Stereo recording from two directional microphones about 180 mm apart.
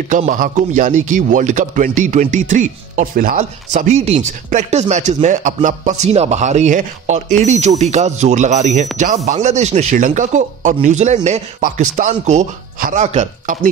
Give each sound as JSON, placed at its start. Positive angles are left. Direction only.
{"t": 0.1, "sound": "a man's voice", "side_deg": -45}